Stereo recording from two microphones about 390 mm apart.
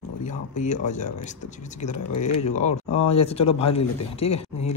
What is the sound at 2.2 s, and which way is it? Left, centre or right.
Speech, centre.